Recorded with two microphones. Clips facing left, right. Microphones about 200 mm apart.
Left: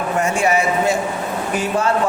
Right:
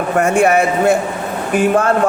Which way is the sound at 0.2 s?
55° right (ahead or behind).